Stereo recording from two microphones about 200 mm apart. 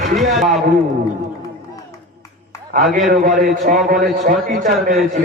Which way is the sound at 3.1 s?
40° right (ahead or behind).